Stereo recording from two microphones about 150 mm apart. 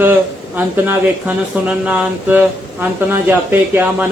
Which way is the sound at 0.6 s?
10° right (ahead or behind).